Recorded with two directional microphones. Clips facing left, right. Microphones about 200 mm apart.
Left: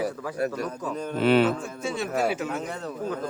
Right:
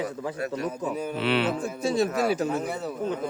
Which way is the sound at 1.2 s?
45° left (ahead or behind).